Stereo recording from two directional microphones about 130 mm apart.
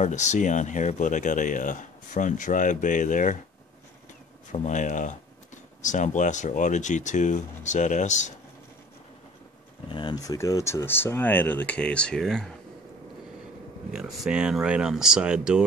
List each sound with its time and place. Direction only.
0.0 s speech: 65° left (ahead or behind)
4.5 s speech: 70° left (ahead or behind)
9.8 s speech: 35° left (ahead or behind); by 12.5 s 5° left (ahead or behind)
13.9 s speech: 5° right (ahead or behind)